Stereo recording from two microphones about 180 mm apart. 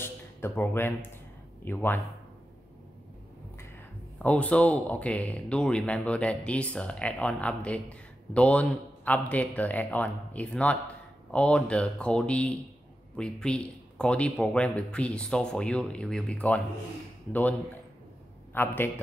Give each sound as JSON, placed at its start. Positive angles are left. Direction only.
{"t": 0.0, "sound": "a sound", "side_deg": 10}
{"t": 1.6, "sound": "speech", "side_deg": 10}
{"t": 4.2, "sound": "a man's voice", "side_deg": 5}